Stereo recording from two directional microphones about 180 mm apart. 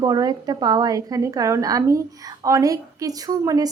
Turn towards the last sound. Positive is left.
turn(degrees=-20)  # may be behind; listen again after turning